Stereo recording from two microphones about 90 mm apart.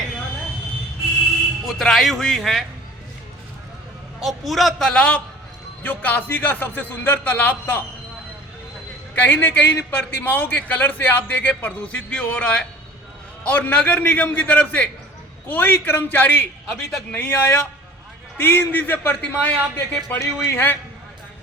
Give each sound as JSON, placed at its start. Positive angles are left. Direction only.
{"t": 1.6, "sound": "speech", "side_deg": 0}
{"t": 4.2, "sound": "a man's voice", "side_deg": 0}
{"t": 9.1, "sound": "a man's voice", "side_deg": 20}
{"t": 20.4, "sound": "a man's voice", "side_deg": 25}